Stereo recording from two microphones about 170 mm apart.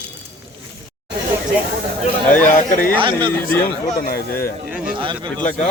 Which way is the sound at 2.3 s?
50° left (ahead or behind).